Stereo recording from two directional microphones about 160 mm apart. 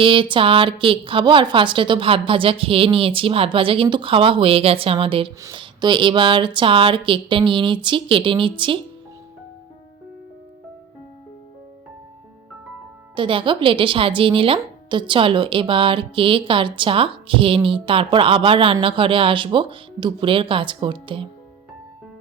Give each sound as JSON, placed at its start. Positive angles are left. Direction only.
{"t": 0.0, "sound": "a woman's voice", "side_deg": -30}
{"t": 13.1, "sound": "a woman's voice", "side_deg": -30}